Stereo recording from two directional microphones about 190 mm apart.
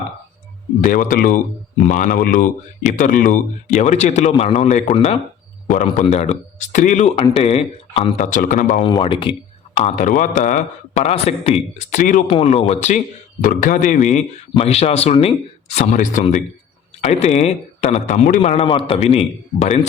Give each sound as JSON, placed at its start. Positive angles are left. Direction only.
{"t": 0.8, "sound": "speech", "side_deg": 45}
{"t": 7.2, "sound": "speech", "side_deg": 25}
{"t": 8.8, "sound": "speech", "side_deg": 25}
{"t": 9.7, "sound": "speech", "side_deg": 35}